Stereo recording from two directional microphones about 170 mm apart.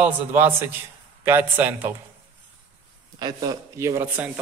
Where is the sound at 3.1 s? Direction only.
25° right (ahead or behind).